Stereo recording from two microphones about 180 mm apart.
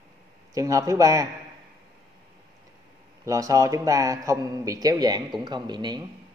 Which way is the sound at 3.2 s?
20° right (ahead or behind).